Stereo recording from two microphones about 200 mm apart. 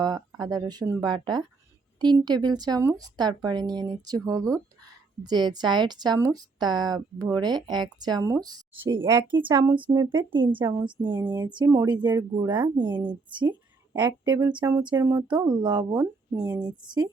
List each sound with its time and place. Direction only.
0.0 s a sound: 20° right (ahead or behind)
0.5 s a woman's voice: 20° right (ahead or behind)
11.0 s a woman's voice: 10° right (ahead or behind)
11.3 s speech: 20° right (ahead or behind)
13.9 s speech: 10° right (ahead or behind)